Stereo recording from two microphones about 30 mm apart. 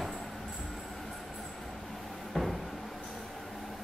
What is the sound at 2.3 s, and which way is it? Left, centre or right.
Cupboard open or close, centre.